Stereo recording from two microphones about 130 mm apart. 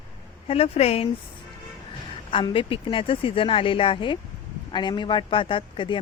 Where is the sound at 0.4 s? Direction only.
50° left (ahead or behind).